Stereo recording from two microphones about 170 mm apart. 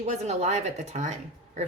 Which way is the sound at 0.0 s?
40° right (ahead or behind).